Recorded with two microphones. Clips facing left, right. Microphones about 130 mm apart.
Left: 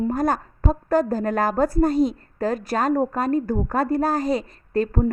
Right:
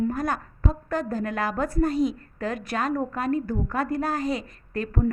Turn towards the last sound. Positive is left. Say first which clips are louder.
# left 7 dB
turn(degrees=35)  # may be behind; listen again after turning